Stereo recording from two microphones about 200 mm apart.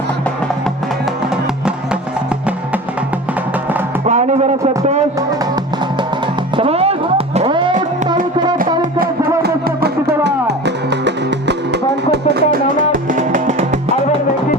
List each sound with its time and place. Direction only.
4.0 s music: 35° right (ahead or behind)
6.6 s music: 30° right (ahead or behind)
9.4 s music: 50° right (ahead or behind); by 13.7 s 35° right (ahead or behind)